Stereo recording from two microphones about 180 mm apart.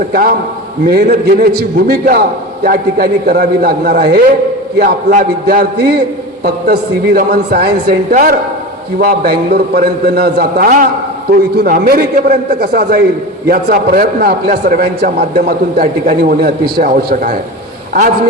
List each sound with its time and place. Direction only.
0.1 s a man's voice: 55° right (ahead or behind)